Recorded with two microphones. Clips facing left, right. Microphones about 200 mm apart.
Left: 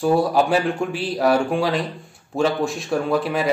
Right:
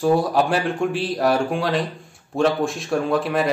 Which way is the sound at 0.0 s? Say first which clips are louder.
Even; centre (ahead or behind).